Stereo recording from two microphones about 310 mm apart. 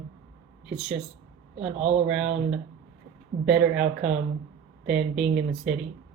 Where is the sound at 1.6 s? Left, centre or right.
Right.